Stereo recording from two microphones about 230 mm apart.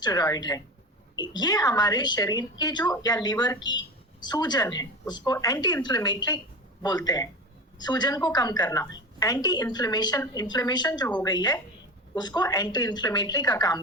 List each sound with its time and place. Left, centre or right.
0.0 s a woman's voice: centre